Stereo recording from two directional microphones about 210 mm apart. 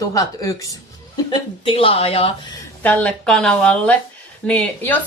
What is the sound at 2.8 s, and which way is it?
A woman's voice, 5° left (ahead or behind).